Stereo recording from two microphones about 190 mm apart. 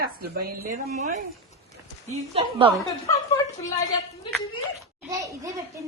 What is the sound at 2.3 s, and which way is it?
Speech, 30° right (ahead or behind).